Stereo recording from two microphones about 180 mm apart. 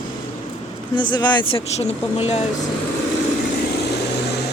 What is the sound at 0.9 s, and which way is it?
Speech, 25° left (ahead or behind).